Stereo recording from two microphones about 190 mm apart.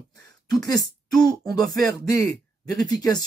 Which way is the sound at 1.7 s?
20° left (ahead or behind).